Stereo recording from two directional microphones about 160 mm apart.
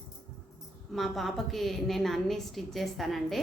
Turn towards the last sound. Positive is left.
turn(degrees=0)  # may be behind; listen again after turning